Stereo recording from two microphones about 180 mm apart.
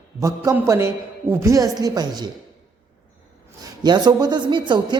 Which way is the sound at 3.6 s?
25° right (ahead or behind).